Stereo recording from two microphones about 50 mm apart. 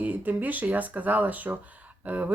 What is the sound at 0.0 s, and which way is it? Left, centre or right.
Speech, right.